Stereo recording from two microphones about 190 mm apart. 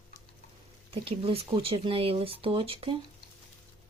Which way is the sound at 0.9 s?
30° right (ahead or behind).